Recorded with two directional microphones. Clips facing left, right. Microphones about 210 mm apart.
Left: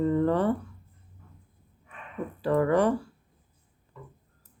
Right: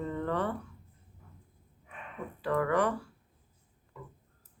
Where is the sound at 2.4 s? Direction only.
30° left (ahead or behind).